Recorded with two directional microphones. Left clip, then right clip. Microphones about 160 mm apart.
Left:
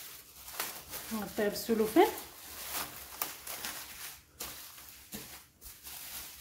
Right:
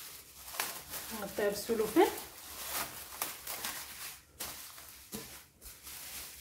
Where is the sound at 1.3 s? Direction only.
55° left (ahead or behind).